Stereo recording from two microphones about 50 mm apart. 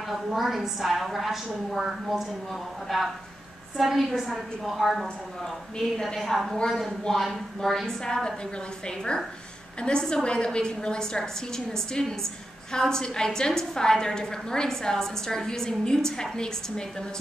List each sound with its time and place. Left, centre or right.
0.1 s a woman's voice: centre
5.0 s a woman's voice: centre